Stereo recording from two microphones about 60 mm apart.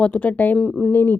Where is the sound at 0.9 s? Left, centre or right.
Left.